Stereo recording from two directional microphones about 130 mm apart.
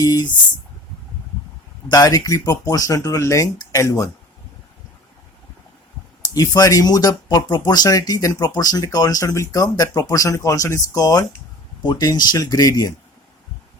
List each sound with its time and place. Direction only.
0.0 s speech: 30° left (ahead or behind)
1.9 s speech: 30° left (ahead or behind)
6.3 s speech: 25° left (ahead or behind)